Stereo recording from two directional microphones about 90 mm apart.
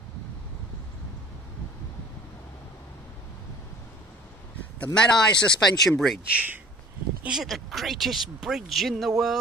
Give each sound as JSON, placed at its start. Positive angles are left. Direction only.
{"t": 4.7, "sound": "speech", "side_deg": 15}
{"t": 6.3, "sound": "speech", "side_deg": -20}
{"t": 7.2, "sound": "speech", "side_deg": -5}